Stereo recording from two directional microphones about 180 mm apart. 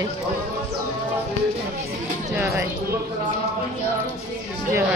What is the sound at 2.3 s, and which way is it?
Speech, 10° right (ahead or behind).